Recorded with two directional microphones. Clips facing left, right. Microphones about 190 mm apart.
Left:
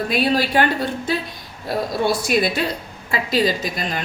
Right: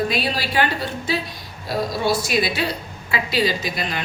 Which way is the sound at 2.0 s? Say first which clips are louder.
Left 3 dB; 50° left (ahead or behind).